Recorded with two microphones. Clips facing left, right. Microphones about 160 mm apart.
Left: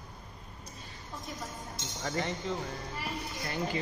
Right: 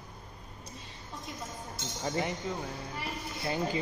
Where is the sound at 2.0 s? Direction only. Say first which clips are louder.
Right 1 dB; 20° right (ahead or behind).